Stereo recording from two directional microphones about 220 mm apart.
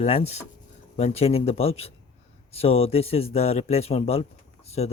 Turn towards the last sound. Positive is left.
turn(degrees=30)  # may be behind; listen again after turning